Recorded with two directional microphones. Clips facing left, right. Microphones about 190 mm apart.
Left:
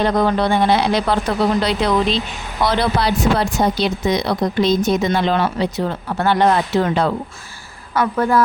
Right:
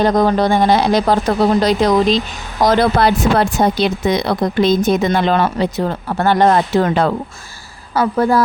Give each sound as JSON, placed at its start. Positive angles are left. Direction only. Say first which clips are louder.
{"t": 0.0, "sound": "speech", "louder": "right 3 dB", "side_deg": -40}
{"t": 7.9, "sound": "a woman's voice", "louder": "right 2 dB", "side_deg": -30}